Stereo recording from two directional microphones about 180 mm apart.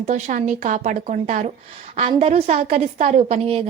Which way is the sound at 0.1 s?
45° right (ahead or behind).